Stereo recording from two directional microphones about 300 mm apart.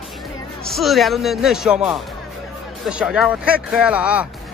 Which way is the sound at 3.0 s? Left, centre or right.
Centre.